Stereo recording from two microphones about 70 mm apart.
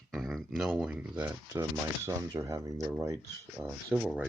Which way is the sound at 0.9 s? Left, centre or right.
Right.